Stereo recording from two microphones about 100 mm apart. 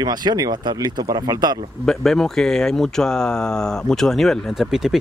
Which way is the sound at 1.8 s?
5° left (ahead or behind).